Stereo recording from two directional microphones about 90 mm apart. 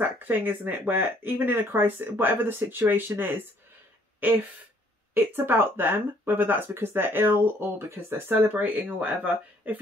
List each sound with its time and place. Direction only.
0.0 s speech: 20° right (ahead or behind)
5.1 s speech: 20° right (ahead or behind)